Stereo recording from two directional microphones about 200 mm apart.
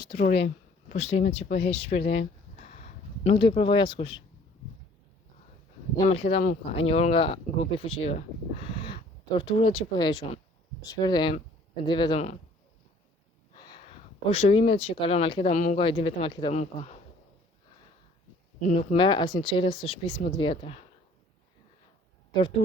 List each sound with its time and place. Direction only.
0.2 s speech: 55° left (ahead or behind)
0.9 s speech: 30° left (ahead or behind)
6.1 s speech: 30° left (ahead or behind)
13.7 s speech: 25° left (ahead or behind)
15.5 s speech: 40° left (ahead or behind)
15.8 s speech: 25° left (ahead or behind)
18.6 s speech: 35° left (ahead or behind)
18.9 s speech: 25° left (ahead or behind)